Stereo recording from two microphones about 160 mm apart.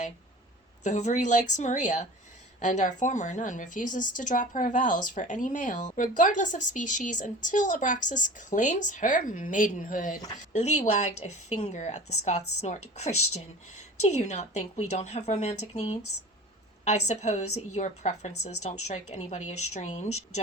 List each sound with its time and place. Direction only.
0.9 s a woman's voice: 45° left (ahead or behind)